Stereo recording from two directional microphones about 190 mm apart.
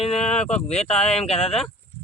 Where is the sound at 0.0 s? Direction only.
35° left (ahead or behind).